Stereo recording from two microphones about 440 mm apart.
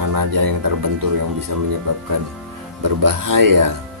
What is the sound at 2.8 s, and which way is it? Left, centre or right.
Speech, right.